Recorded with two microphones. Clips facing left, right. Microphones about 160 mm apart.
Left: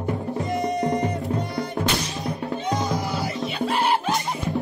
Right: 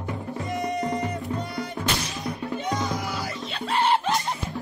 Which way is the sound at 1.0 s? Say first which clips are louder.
Left 4 dB; 40° left (ahead or behind).